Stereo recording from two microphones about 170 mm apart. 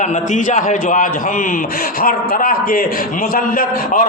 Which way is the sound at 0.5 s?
50° left (ahead or behind).